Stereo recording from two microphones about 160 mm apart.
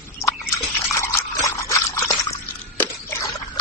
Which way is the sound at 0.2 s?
20° left (ahead or behind).